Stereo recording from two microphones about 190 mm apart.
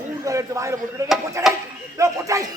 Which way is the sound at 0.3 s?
15° right (ahead or behind).